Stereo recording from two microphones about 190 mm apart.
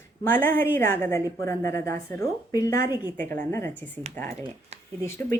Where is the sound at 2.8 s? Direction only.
10° right (ahead or behind).